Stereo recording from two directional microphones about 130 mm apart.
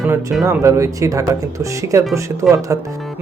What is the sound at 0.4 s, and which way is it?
Speech, 25° right (ahead or behind).